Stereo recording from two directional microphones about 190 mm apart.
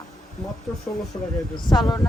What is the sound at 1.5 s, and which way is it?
Speech, 20° left (ahead or behind).